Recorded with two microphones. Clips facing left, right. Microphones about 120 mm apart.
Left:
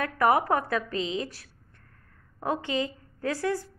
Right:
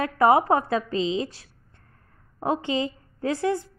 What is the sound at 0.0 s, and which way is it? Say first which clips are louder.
A woman's voice: right 4 dB; 25° right (ahead or behind).